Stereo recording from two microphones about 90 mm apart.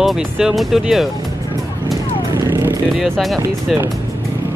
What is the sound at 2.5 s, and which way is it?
Vehicle, 30° right (ahead or behind).